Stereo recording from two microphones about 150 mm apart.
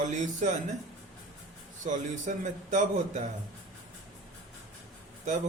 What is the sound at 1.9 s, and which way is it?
A man's voice, 55° right (ahead or behind).